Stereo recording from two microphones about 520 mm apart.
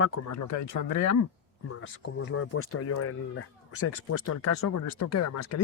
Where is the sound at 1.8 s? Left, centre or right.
Left.